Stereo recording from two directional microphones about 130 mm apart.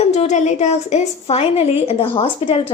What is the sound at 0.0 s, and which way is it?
A woman's voice, 60° left (ahead or behind).